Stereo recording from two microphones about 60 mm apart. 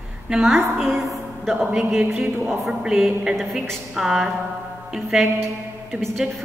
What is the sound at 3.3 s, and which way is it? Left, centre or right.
A woman's voice, centre.